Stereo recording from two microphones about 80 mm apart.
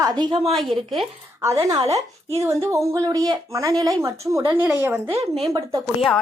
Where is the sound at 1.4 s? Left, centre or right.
Right.